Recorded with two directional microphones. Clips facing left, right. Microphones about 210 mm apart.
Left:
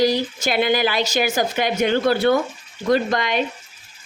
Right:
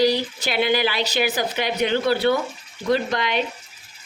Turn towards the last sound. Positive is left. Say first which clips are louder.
# left 2 dB
turn(degrees=45)  # may be behind; listen again after turning